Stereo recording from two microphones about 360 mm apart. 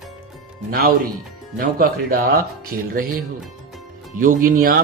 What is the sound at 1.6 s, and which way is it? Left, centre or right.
Speech, right.